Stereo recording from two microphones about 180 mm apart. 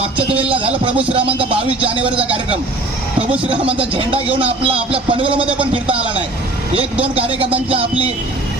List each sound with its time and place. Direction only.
1.1 s speech: 30° right (ahead or behind)
3.8 s speech: 30° right (ahead or behind)